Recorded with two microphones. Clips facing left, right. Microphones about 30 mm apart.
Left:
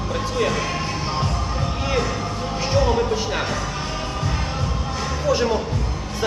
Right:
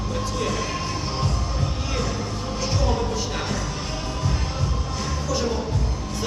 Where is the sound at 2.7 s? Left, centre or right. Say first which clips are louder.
Left 7 dB; left.